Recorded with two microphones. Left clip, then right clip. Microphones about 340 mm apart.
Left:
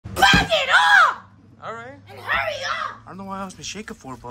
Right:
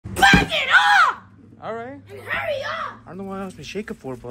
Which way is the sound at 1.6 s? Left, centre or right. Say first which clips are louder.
Right 3 dB; centre.